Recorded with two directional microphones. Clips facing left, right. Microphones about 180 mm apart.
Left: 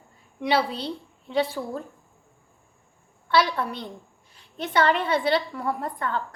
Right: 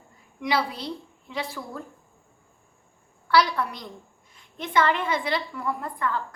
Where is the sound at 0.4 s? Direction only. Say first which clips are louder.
Left 3 dB; 30° left (ahead or behind).